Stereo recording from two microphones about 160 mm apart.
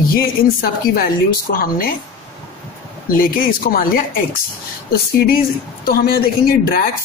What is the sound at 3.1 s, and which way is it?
Speech, 65° left (ahead or behind).